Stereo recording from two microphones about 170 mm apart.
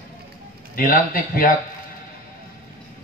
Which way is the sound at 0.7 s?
55° left (ahead or behind).